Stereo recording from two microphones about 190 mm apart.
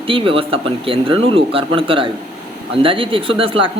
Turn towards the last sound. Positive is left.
turn(degrees=-30)  # may be behind; listen again after turning